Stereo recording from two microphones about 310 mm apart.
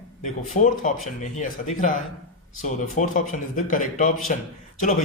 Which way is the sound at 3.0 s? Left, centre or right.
Left.